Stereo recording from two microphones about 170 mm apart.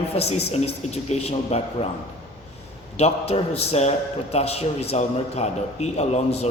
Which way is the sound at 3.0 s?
35° left (ahead or behind).